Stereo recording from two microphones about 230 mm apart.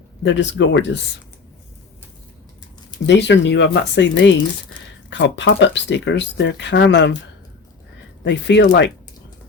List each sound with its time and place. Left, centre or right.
0.2 s speech: left
3.2 s speech: left
8.2 s speech: left